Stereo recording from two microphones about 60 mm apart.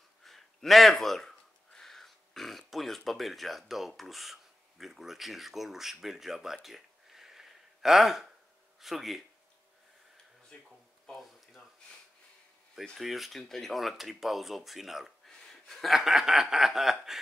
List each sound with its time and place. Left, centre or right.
0.2 s speech: centre
10.5 s speech: centre
12.9 s speech: centre
15.2 s a sound: centre
15.7 s speech: centre